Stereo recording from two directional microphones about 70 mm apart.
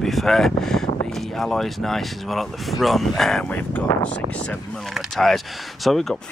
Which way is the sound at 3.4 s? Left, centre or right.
Left.